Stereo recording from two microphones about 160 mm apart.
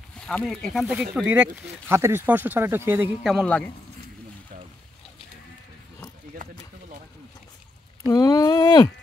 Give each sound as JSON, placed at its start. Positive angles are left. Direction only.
{"t": 0.3, "sound": "speech", "side_deg": 5}
{"t": 3.3, "sound": "a man's voice", "side_deg": 5}
{"t": 8.1, "sound": "speech", "side_deg": 20}